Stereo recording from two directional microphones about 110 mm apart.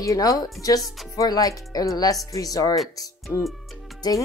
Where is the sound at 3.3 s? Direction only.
20° left (ahead or behind).